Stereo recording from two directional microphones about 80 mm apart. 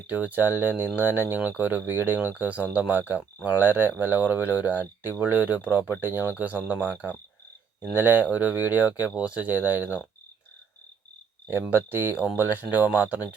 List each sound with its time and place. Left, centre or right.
0.1 s speech: right
11.7 s speech: right